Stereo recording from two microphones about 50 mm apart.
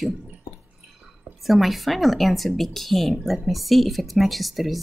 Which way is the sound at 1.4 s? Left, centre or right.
Centre.